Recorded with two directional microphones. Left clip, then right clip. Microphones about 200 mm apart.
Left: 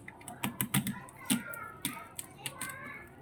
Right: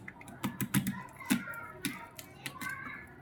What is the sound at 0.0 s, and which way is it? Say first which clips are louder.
Typing: left 1 dB; 5° right (ahead or behind).